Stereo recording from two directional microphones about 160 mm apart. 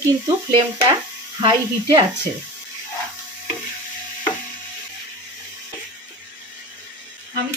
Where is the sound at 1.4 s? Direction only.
25° right (ahead or behind).